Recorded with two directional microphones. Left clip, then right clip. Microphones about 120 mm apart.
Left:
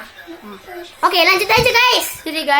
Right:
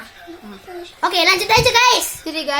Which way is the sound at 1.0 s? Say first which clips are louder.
Left 2 dB; 50° right (ahead or behind).